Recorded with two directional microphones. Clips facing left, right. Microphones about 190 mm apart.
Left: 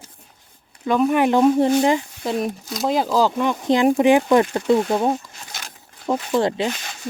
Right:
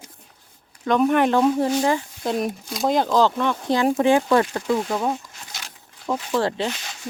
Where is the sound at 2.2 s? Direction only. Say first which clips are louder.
Left 1 dB; centre (ahead or behind); by 5.2 s 30° left (ahead or behind).